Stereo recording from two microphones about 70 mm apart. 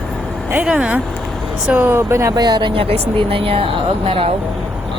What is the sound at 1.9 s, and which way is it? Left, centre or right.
Speech, right.